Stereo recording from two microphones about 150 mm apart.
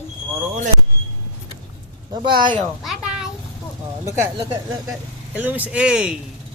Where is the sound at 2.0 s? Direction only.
30° right (ahead or behind).